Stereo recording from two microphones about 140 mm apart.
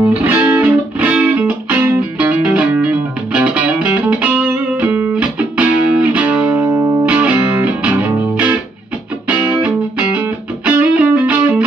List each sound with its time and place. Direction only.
0.2 s music: 15° right (ahead or behind)